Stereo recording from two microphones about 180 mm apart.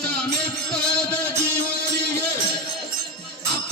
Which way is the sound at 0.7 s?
5° left (ahead or behind).